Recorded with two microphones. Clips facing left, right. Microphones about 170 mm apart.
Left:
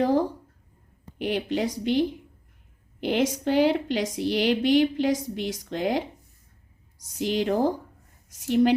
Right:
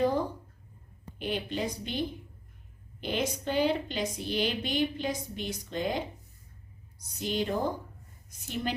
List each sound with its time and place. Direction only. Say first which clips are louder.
0.0 s a sound: left 5 dB; 90° left
1.2 s a woman's voice: left 6 dB; 90° left
7.2 s a woman's voice: left 7 dB; 90° left